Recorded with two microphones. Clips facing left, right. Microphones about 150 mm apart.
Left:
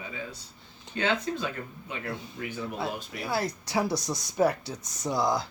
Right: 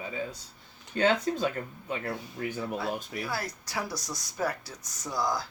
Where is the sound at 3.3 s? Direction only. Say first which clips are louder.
Left 5 dB; 25° left (ahead or behind).